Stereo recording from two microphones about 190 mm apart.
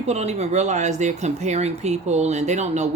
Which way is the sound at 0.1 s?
35° right (ahead or behind).